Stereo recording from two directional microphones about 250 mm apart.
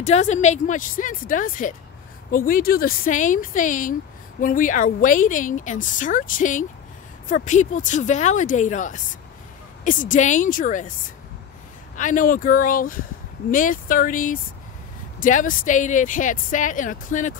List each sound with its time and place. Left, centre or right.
0.0 s a woman's voice: left
12.0 s a woman's voice: left